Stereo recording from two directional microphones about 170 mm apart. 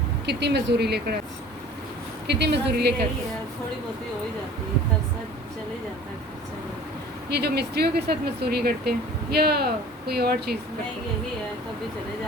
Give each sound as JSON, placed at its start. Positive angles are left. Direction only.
{"t": 0.3, "sound": "speech", "side_deg": -85}
{"t": 2.2, "sound": "speech", "side_deg": -80}
{"t": 7.3, "sound": "speech", "side_deg": -70}